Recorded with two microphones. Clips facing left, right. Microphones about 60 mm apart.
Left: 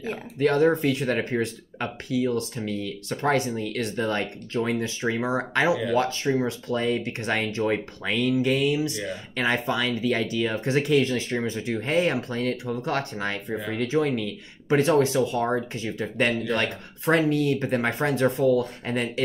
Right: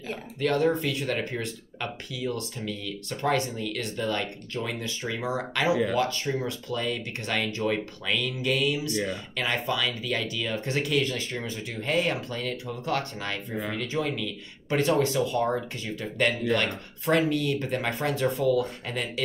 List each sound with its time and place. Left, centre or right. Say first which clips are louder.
0.0 s speech: left 5 dB; centre